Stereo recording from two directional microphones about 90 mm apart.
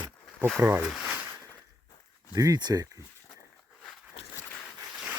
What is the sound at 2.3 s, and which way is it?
Speech, 45° right (ahead or behind).